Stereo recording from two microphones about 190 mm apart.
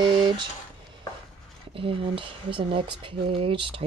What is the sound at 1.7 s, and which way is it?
Speech, 30° right (ahead or behind).